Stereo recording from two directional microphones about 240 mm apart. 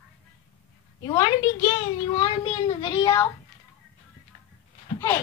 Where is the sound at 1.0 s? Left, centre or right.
Centre.